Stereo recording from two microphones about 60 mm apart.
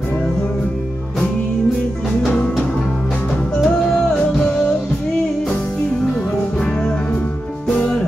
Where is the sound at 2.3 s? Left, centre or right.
Centre.